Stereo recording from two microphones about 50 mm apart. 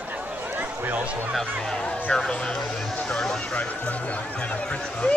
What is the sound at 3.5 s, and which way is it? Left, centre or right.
Speech, left.